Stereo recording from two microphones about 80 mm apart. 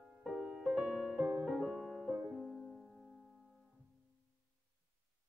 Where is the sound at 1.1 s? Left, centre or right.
Right.